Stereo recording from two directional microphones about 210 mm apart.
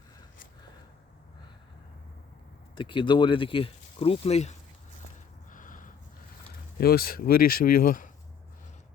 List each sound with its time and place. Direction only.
2.7 s speech: 25° left (ahead or behind)
5.5 s a sound: 40° left (ahead or behind)
6.7 s speech: 45° left (ahead or behind)